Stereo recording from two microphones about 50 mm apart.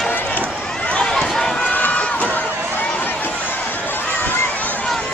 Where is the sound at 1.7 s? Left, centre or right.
Left.